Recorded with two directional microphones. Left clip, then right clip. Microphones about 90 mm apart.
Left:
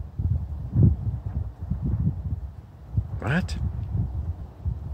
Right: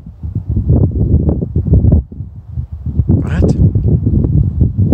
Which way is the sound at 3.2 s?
15° right (ahead or behind).